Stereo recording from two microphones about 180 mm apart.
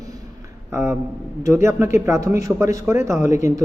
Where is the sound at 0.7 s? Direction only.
15° right (ahead or behind).